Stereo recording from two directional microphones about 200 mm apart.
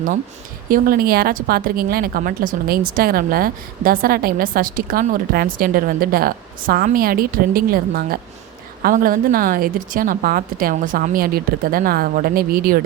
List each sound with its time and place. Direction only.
0.7 s speech: 45° right (ahead or behind)